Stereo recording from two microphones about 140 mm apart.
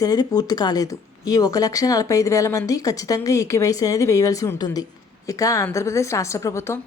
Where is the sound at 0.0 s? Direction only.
25° left (ahead or behind).